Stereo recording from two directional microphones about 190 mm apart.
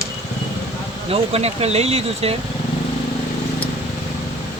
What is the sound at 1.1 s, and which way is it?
Speech, 30° right (ahead or behind).